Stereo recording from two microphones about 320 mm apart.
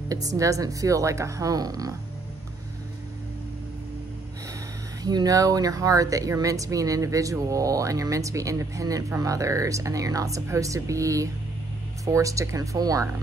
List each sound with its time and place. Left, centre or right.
0.4 s speech: centre
5.0 s speech: centre